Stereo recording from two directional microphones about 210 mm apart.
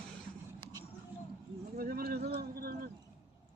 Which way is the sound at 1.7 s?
45° right (ahead or behind).